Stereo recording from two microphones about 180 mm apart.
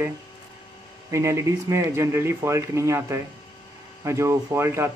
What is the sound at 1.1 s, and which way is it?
Speech, 15° right (ahead or behind).